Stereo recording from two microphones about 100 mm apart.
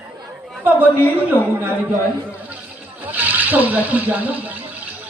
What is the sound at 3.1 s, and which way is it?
A woman's voice, 15° right (ahead or behind).